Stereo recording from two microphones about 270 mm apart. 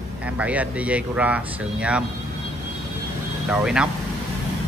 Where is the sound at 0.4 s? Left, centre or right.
Centre.